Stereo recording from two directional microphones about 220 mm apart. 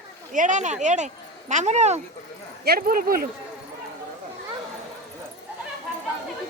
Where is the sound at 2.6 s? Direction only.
45° right (ahead or behind).